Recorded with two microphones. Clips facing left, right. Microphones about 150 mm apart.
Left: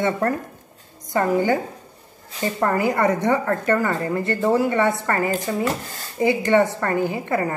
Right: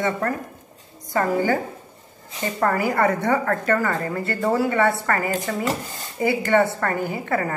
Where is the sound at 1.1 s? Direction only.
20° left (ahead or behind).